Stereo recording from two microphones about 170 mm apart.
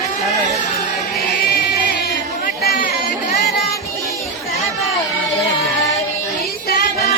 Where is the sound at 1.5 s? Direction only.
80° left.